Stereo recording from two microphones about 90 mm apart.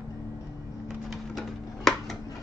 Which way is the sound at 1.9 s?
5° left (ahead or behind).